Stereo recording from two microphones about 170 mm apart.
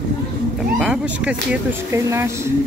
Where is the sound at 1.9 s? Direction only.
15° right (ahead or behind).